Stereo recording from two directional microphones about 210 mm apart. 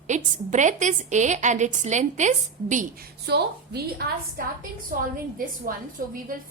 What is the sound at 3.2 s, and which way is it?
A woman's voice, 50° right (ahead or behind).